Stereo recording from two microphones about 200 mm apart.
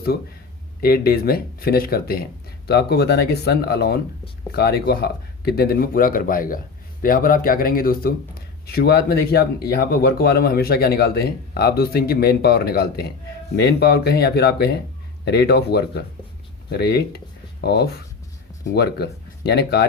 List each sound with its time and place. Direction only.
0.8 s speech: 50° left (ahead or behind)